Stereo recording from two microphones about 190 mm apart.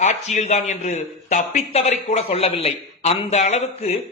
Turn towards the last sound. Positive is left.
turn(degrees=35)  # may be behind; listen again after turning